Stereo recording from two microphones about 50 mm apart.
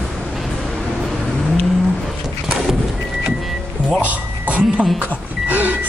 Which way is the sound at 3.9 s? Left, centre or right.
Right.